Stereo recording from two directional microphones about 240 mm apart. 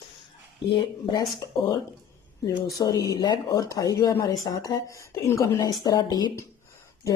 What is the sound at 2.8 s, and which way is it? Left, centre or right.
Speech, centre.